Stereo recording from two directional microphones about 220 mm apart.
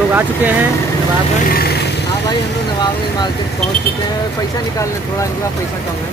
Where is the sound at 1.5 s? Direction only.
45° left (ahead or behind).